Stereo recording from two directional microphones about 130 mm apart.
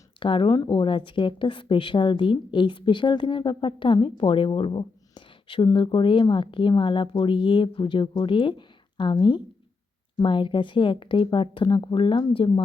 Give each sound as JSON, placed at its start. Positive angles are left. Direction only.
{"t": 0.2, "sound": "speech", "side_deg": 40}